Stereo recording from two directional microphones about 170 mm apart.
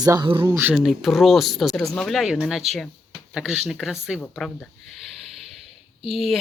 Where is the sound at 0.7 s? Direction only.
Centre (ahead or behind).